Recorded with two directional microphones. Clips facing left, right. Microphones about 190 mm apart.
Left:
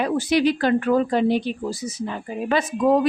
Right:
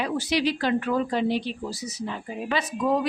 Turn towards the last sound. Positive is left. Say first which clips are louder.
# left 6 dB
turn(degrees=50)  # may be behind; listen again after turning